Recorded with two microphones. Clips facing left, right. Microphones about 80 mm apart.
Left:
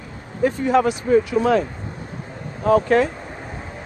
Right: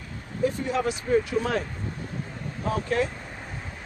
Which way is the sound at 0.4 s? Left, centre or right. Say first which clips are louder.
Left 8 dB; left.